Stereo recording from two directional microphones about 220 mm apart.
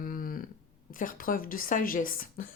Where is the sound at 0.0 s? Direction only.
40° left (ahead or behind).